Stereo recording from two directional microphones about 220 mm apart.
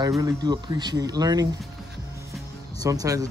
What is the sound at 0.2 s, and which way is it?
Speech, 20° right (ahead or behind).